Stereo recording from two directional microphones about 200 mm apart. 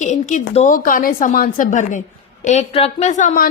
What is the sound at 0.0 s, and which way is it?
A woman's voice, 40° left (ahead or behind).